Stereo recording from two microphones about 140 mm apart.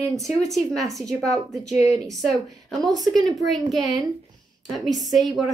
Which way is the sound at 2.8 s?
30° right (ahead or behind).